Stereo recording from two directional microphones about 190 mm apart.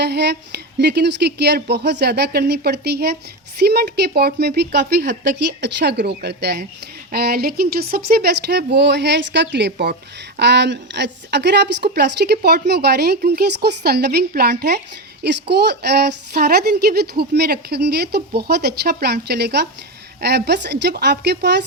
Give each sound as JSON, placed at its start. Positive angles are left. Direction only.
{"t": 0.0, "sound": "speech", "side_deg": -60}